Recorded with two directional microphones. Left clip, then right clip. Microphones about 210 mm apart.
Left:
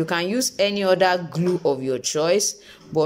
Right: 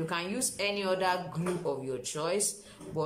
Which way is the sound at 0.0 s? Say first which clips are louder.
Left 11 dB; 40° left (ahead or behind).